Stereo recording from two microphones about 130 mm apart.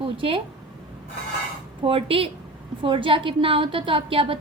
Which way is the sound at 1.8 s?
45° right (ahead or behind).